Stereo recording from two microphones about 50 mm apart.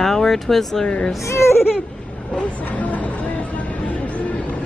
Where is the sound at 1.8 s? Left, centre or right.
Left.